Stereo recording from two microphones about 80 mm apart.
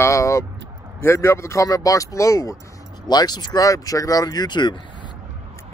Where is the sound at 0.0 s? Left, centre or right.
Left.